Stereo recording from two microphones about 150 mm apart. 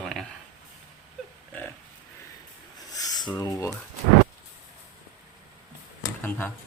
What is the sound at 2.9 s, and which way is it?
Rub, 25° left (ahead or behind).